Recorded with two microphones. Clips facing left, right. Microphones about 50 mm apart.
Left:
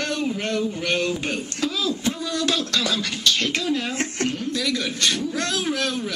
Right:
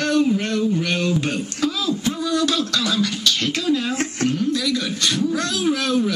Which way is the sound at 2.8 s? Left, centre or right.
Left.